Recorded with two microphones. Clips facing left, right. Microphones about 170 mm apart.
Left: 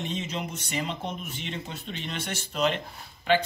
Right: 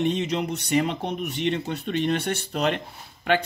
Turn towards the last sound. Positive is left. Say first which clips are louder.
# right 1 dB
turn(degrees=-55)  # may be behind; listen again after turning